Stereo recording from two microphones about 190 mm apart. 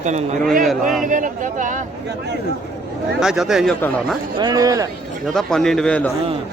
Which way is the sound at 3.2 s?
5° right (ahead or behind).